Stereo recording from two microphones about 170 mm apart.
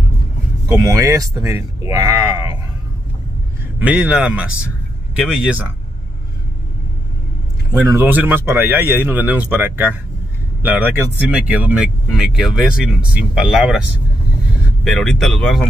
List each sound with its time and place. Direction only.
0.8 s speech: 20° right (ahead or behind)
3.8 s speech: 10° right (ahead or behind)
7.9 s speech: 10° right (ahead or behind)
14.9 s speech: centre (ahead or behind)